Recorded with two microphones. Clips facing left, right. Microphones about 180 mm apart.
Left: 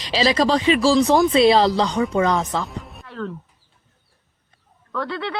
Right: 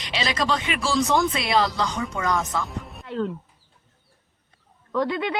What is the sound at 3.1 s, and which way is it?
Speech, 20° right (ahead or behind).